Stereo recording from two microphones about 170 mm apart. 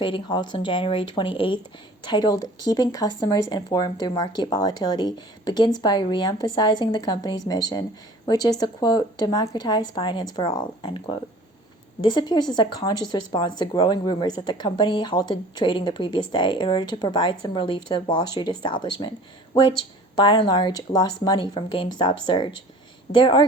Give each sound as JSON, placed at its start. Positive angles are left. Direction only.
{"t": 0.0, "sound": "speech", "side_deg": 25}
{"t": 20.1, "sound": "speech", "side_deg": 30}